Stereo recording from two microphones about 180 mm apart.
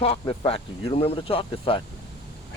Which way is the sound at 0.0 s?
30° left (ahead or behind).